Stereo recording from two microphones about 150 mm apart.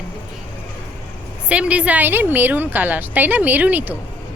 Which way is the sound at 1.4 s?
10° right (ahead or behind).